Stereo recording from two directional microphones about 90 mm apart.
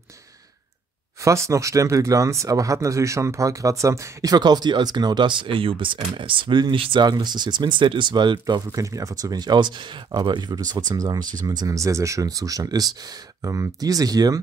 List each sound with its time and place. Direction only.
1.2 s speech: 35° right (ahead or behind); by 7.1 s 70° right (ahead or behind)
7.1 s speech: 50° right (ahead or behind)
8.7 s speech: 40° right (ahead or behind)